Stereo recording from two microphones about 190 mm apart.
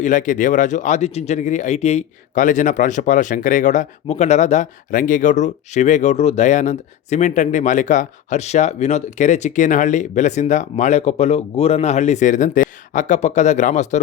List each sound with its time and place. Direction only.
0.0 s speech: 40° left (ahead or behind)